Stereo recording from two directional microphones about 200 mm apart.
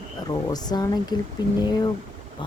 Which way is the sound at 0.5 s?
20° left (ahead or behind).